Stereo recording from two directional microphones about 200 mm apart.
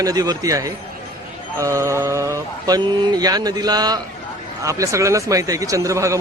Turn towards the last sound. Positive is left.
turn(degrees=-15)  # may be behind; listen again after turning